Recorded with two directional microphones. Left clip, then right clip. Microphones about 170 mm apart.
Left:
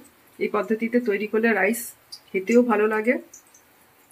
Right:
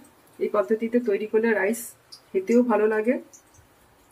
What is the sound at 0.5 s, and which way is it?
Speech, 40° left (ahead or behind).